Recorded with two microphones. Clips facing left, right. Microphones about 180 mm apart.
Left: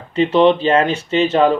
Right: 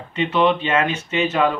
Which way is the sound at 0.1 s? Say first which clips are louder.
Left 6 dB; 30° left (ahead or behind).